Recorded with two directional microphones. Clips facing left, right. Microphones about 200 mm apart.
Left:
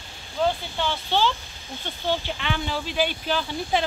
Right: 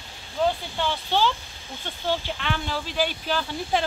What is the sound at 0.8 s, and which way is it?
Speech, 10° right (ahead or behind).